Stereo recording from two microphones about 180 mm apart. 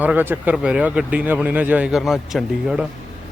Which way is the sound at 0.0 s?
10° right (ahead or behind).